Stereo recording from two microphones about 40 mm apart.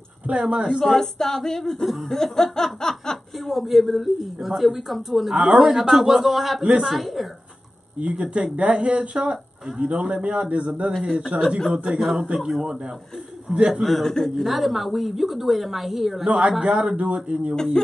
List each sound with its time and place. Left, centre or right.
0.3 s speech: right
0.7 s speech: centre
3.4 s a woman's voice: centre
5.3 s speech: right
5.6 s a woman's voice: centre
8.0 s speech: right
10.9 s a woman's voice: centre
13.5 s speech: right
13.8 s a woman's voice: centre
16.3 s speech: right